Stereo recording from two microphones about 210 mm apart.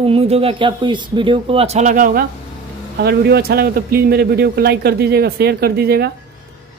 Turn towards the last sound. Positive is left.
turn(degrees=-50)  # may be behind; listen again after turning